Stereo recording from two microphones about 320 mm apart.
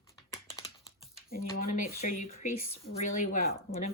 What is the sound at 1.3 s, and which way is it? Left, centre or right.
Speech, left.